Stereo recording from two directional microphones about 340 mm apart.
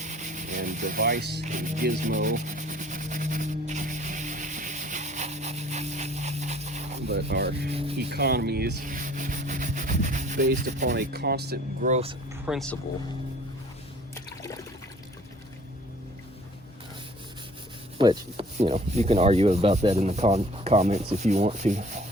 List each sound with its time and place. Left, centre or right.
0.0 s speech: right
1.5 s rub: right
7.7 s rub: centre
8.1 s rub: right
12.5 s speech: centre
17.9 s rub: centre